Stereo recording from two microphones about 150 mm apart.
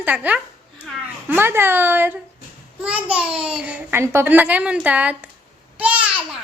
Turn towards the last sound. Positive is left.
turn(degrees=-10)  # may be behind; listen again after turning